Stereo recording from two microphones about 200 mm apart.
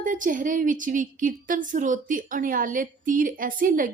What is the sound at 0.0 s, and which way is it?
A woman's voice, 40° right (ahead or behind).